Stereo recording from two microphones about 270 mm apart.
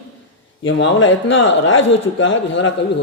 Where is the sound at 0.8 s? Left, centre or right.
Left.